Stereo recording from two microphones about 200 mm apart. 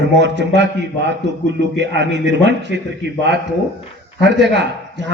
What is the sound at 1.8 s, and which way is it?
A man's voice, 60° right (ahead or behind).